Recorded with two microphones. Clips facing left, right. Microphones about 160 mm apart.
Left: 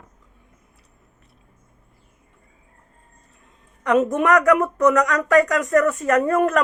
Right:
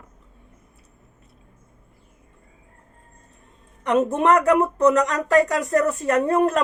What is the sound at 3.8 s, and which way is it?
A woman's voice, 30° right (ahead or behind).